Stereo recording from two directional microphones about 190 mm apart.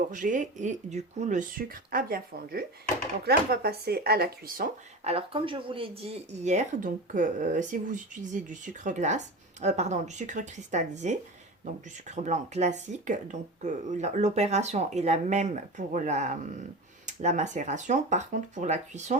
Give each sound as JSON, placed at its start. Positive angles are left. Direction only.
{"t": 0.1, "sound": "speech", "side_deg": -40}
{"t": 5.0, "sound": "speech", "side_deg": -30}